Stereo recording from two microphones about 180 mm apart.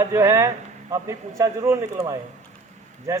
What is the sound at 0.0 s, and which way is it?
Speech, 15° right (ahead or behind).